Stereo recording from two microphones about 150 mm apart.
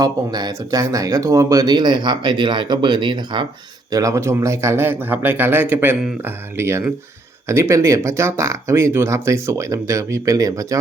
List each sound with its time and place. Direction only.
0.0 s speech: 25° right (ahead or behind)
3.9 s a man's voice: 20° right (ahead or behind)